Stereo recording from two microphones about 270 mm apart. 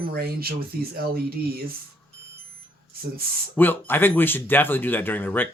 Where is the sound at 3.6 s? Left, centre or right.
Centre.